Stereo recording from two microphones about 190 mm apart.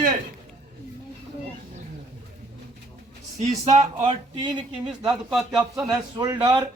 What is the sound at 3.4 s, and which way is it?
A man's voice, 35° right (ahead or behind).